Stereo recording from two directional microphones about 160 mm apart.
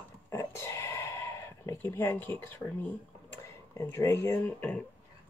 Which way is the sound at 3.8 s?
15° left (ahead or behind).